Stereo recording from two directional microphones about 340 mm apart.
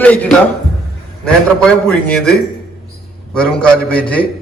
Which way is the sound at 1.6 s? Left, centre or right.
Centre.